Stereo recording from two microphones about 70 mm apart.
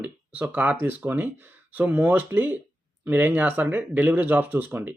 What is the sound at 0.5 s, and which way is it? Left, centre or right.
Speech, right.